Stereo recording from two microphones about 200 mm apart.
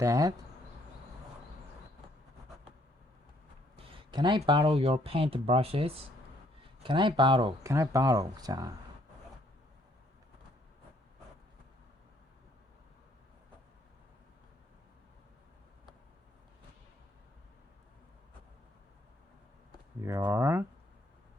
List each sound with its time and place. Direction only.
0.0 s speech: 15° right (ahead or behind)
4.1 s speech: 25° right (ahead or behind)
20.1 s speech: 15° right (ahead or behind)